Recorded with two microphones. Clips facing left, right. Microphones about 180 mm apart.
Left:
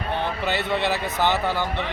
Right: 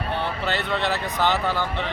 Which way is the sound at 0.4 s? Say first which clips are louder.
Left 2 dB; 15° left (ahead or behind).